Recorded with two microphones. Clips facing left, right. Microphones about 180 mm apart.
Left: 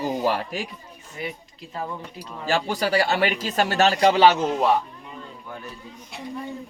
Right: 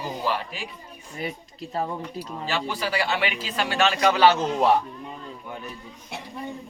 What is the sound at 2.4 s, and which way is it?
Speech, 45° left (ahead or behind).